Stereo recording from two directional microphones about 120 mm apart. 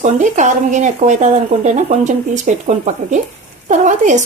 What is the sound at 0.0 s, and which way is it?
Speech, 85° right.